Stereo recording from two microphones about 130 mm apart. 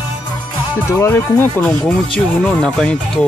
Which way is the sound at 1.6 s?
10° left (ahead or behind).